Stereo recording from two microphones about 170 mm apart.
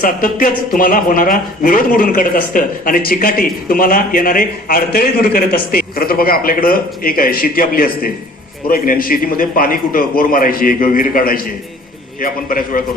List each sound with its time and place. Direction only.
0.0 s speech: 55° left (ahead or behind)